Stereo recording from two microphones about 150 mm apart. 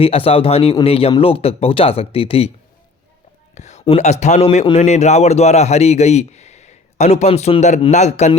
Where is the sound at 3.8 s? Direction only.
50° left (ahead or behind).